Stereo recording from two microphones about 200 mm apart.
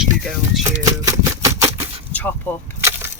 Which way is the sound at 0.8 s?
15° right (ahead or behind).